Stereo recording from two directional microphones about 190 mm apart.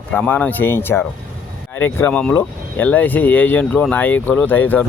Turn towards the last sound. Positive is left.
turn(degrees=10)  # may be behind; listen again after turning